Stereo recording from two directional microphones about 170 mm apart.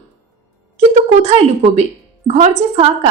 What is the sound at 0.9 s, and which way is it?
A woman's voice, 40° right (ahead or behind).